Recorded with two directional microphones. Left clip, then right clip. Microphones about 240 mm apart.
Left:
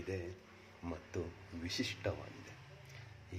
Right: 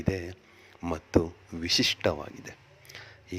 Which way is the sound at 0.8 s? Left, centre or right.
Right.